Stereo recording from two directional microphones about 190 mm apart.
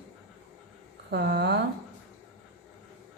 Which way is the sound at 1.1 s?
60° right (ahead or behind).